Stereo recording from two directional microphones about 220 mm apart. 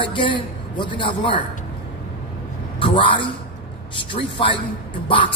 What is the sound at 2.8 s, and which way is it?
A man's voice, 20° left (ahead or behind).